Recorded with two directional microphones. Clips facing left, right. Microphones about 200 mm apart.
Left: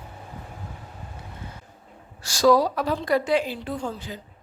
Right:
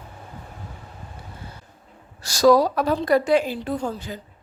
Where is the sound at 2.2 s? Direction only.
40° right (ahead or behind).